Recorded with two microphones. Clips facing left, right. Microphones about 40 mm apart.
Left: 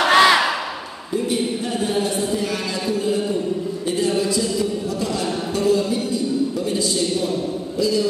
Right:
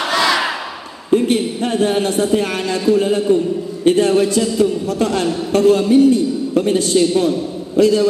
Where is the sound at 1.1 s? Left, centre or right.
Right.